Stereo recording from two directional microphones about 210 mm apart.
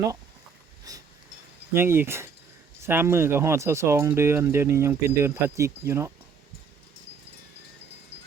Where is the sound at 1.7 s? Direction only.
10° right (ahead or behind).